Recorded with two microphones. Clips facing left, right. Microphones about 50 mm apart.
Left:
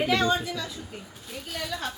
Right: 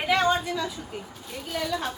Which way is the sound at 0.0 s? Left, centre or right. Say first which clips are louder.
Right 1 dB; centre.